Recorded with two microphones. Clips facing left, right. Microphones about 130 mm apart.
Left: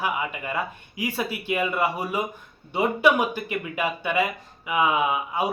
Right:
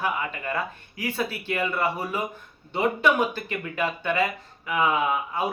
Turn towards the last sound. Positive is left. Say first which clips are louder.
# left 1 dB
turn(degrees=10)  # may be behind; listen again after turning